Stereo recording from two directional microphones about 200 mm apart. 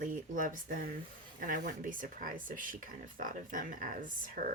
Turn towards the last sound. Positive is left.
turn(degrees=-40)  # may be behind; listen again after turning